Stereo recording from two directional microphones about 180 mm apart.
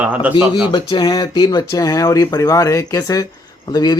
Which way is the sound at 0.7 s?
25° left (ahead or behind).